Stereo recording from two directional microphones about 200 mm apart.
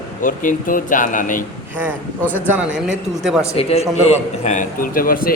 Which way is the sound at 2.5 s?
5° right (ahead or behind).